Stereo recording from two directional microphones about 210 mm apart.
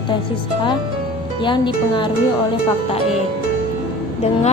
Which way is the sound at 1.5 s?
20° left (ahead or behind).